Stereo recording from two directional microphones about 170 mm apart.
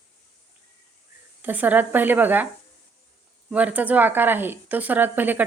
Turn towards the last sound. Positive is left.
turn(degrees=-10)  # may be behind; listen again after turning